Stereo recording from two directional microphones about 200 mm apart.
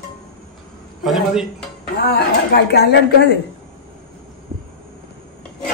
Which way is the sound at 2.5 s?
55° left (ahead or behind).